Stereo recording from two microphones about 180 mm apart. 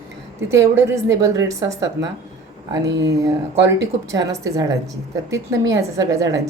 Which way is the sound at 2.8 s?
75° right (ahead or behind).